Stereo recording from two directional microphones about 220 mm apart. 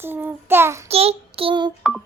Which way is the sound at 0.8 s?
25° right (ahead or behind).